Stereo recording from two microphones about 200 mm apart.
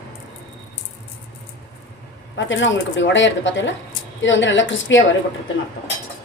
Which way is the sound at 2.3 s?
70° left (ahead or behind).